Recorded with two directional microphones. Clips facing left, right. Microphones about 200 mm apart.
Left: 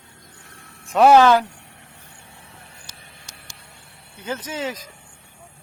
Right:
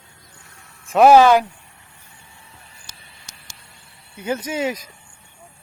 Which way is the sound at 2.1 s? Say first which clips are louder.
Even; 65° left (ahead or behind).